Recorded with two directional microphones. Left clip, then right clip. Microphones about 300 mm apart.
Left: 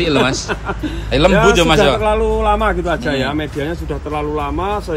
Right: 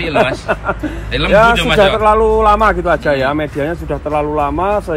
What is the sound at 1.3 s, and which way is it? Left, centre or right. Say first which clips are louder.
Speech: right 5 dB; centre.